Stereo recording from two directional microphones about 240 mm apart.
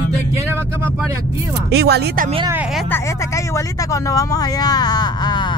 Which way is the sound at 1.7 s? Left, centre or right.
Right.